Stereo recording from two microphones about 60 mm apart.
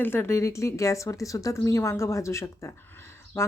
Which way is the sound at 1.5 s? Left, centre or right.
Left.